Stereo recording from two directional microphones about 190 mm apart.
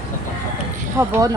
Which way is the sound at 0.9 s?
15° right (ahead or behind).